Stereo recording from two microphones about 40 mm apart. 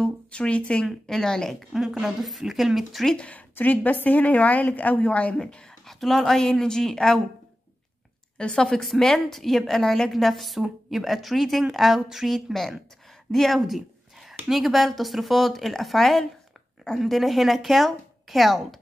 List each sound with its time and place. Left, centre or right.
0.0 s speech: left
1.0 s a woman's voice: centre
1.7 s a woman's voice: centre
3.2 s speech: left
3.5 s a woman's voice: left
5.3 s a woman's voice: left
5.9 s a woman's voice: centre
8.4 s a woman's voice: centre
13.3 s speech: centre